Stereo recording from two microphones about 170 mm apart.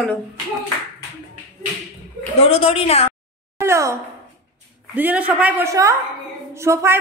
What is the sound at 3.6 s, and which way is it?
A woman's voice, 15° right (ahead or behind).